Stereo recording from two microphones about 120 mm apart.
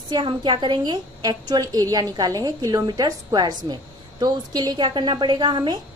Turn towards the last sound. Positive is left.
turn(degrees=-40)  # may be behind; listen again after turning